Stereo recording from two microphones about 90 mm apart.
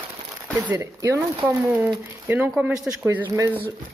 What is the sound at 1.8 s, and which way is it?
Speech, 20° right (ahead or behind).